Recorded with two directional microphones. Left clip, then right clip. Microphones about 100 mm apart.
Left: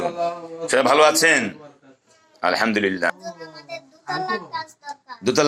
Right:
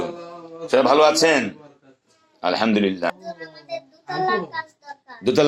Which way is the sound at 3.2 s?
25° right (ahead or behind).